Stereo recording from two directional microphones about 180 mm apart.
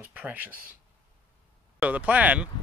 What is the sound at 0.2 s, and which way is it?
Speech, 10° right (ahead or behind).